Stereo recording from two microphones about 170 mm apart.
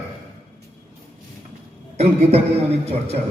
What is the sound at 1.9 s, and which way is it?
A man's voice, 40° right (ahead or behind).